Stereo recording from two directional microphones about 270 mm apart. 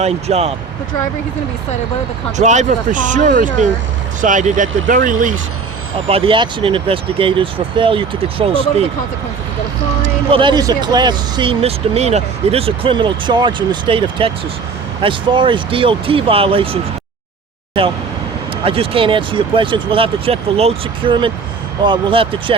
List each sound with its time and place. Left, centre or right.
0.0 s speech: right
2.4 s speech: right
10.0 s speech: centre
17.8 s speech: centre